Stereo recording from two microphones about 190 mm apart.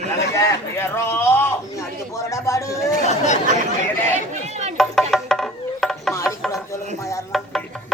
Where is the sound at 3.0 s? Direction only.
40° left (ahead or behind).